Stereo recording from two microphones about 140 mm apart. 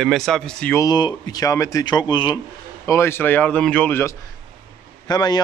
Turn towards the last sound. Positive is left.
turn(degrees=30)  # may be behind; listen again after turning